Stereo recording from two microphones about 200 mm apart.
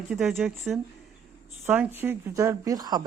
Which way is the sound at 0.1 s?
5° right (ahead or behind).